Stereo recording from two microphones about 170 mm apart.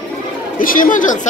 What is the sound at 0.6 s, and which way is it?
Chatter, 55° left (ahead or behind).